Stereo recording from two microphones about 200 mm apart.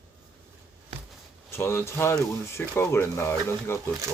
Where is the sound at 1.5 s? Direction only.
10° left (ahead or behind).